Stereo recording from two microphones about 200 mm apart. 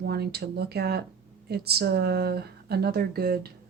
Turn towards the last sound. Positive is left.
turn(degrees=-50)  # may be behind; listen again after turning